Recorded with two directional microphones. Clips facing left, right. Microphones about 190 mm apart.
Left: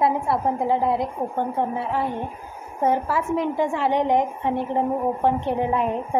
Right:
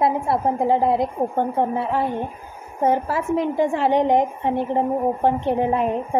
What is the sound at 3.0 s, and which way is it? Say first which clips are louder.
A woman's voice: right 2 dB; 35° right (ahead or behind).